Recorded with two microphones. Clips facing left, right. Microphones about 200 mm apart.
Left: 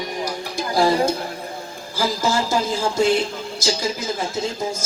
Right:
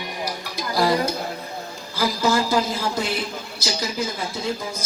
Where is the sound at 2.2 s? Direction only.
45° left (ahead or behind).